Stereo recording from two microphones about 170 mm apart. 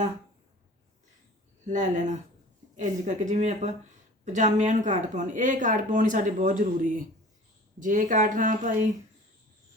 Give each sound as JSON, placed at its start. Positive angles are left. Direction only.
{"t": 1.6, "sound": "speech", "side_deg": -45}